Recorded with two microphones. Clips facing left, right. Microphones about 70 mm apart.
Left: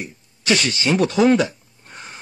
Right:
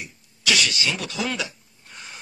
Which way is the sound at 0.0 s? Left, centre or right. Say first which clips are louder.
Right 1 dB; left.